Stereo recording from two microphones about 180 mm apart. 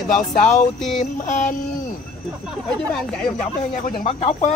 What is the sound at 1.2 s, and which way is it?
Speech, 45° left (ahead or behind).